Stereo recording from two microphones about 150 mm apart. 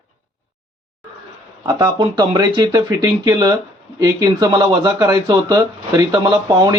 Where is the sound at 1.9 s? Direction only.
35° right (ahead or behind).